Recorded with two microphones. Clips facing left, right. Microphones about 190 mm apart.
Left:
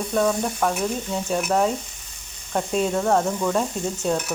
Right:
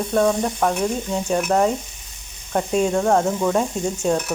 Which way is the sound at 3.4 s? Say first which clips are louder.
Right 3 dB; 15° right (ahead or behind).